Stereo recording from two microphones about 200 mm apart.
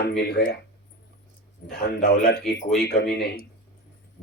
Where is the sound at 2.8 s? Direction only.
55° left (ahead or behind).